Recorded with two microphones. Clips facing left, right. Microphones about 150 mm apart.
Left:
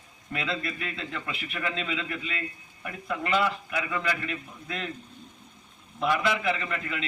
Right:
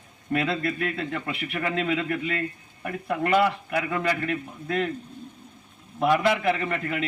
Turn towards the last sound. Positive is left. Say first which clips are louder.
# right 5 dB
turn(degrees=-50)  # may be behind; listen again after turning